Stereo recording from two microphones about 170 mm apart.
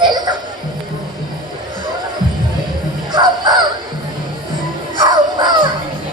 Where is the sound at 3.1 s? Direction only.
25° right (ahead or behind).